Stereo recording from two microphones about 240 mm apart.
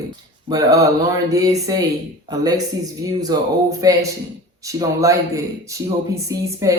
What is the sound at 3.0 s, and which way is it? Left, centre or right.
Speech, centre.